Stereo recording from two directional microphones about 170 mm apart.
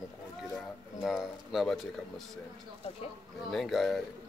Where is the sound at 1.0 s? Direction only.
5° right (ahead or behind).